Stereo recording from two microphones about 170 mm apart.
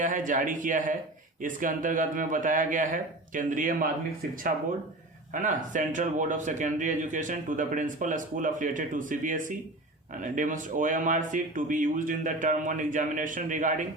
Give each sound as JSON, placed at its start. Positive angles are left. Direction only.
{"t": 0.0, "sound": "speech", "side_deg": -50}
{"t": 5.3, "sound": "speech", "side_deg": -50}